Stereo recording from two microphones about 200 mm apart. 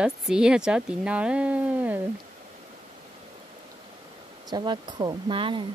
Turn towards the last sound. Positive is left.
turn(degrees=-25)  # may be behind; listen again after turning